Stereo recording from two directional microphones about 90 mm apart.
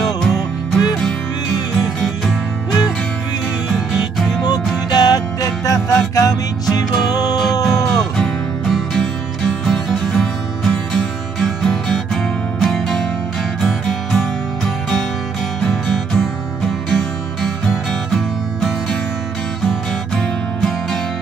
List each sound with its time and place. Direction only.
4.5 s music: 45° left (ahead or behind)
7.6 s music: centre (ahead or behind)
20.2 s music: 5° left (ahead or behind)